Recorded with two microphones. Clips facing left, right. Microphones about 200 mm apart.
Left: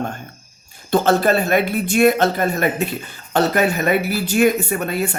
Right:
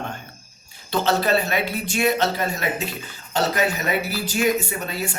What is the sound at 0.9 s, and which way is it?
Speech, 50° left (ahead or behind).